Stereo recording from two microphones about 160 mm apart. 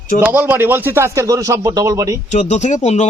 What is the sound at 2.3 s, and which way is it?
Speech, 45° left (ahead or behind).